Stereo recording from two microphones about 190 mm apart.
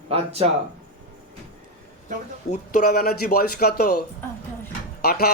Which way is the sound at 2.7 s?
55° left (ahead or behind).